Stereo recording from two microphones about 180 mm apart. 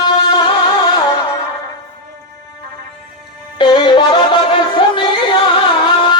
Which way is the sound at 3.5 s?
25° left (ahead or behind).